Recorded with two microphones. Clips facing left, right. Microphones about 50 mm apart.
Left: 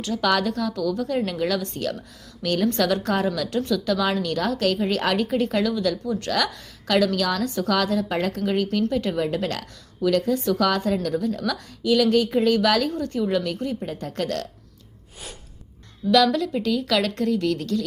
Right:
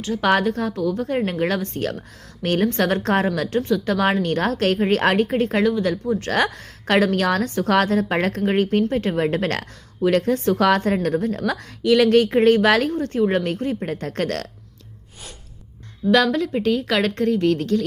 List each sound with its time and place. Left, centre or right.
0.0 s a woman's voice: right
6.3 s speech: right
16.1 s a woman's voice: right